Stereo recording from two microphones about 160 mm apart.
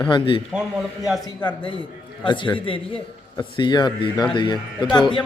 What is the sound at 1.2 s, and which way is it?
A man's voice, 25° left (ahead or behind).